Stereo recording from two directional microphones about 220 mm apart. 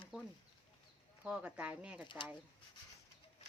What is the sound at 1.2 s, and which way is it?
Speech, 5° right (ahead or behind).